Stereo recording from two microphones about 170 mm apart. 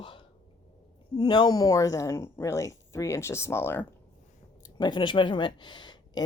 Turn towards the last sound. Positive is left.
turn(degrees=25)  # may be behind; listen again after turning